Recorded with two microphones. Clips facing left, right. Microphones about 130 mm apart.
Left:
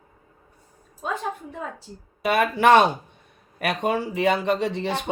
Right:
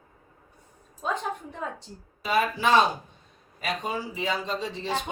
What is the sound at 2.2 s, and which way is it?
A woman's voice, 65° left (ahead or behind).